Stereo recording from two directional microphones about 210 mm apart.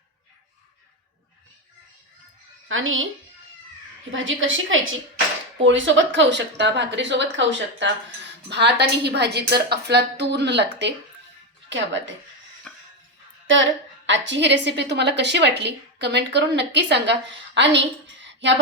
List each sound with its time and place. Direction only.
2.6 s a woman's voice: 70° right (ahead or behind)
4.1 s a woman's voice: 70° right (ahead or behind)
12.7 s music: centre (ahead or behind)
13.5 s a woman's voice: 60° right (ahead or behind)